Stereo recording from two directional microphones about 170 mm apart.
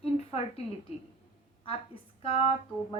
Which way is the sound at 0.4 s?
40° left (ahead or behind).